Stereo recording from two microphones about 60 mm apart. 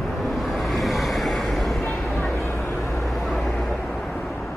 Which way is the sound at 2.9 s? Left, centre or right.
Centre.